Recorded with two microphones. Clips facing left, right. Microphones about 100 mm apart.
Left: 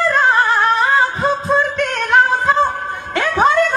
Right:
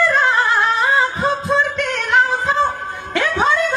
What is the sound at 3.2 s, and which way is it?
Music, 50° left (ahead or behind).